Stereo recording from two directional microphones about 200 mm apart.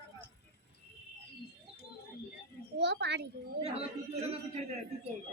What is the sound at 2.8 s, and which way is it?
Speech, 60° right (ahead or behind).